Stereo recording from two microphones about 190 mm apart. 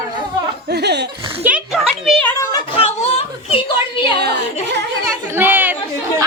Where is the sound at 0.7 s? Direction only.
60° right (ahead or behind).